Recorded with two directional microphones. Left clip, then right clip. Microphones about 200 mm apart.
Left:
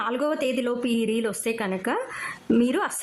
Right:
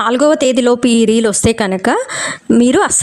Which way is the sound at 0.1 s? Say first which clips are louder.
Right 14 dB; 40° right (ahead or behind).